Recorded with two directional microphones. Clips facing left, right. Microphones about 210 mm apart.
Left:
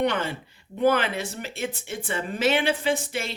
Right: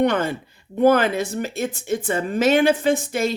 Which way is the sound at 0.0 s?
45° right (ahead or behind).